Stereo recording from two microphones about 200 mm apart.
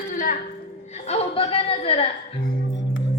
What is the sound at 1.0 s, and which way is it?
A woman's voice, 30° left (ahead or behind).